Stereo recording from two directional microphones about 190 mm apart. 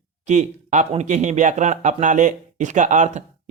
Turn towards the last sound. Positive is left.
turn(degrees=-40)  # may be behind; listen again after turning